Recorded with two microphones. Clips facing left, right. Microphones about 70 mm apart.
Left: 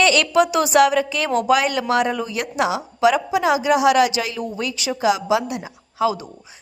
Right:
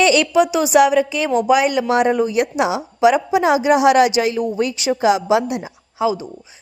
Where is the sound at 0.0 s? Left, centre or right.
Centre.